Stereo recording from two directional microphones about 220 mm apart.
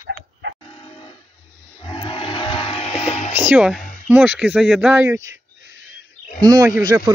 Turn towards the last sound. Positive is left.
turn(degrees=-10)  # may be behind; listen again after turning